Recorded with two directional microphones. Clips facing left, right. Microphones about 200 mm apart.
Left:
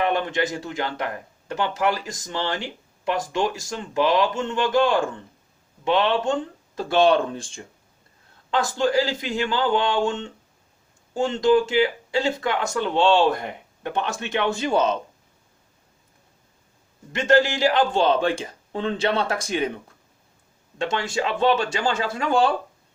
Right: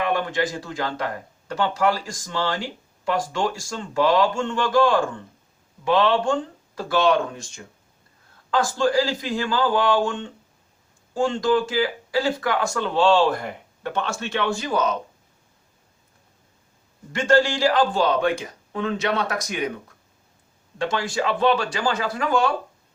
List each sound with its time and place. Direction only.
0.0 s speech: 20° left (ahead or behind)
17.1 s speech: 20° left (ahead or behind)
20.7 s speech: 25° left (ahead or behind)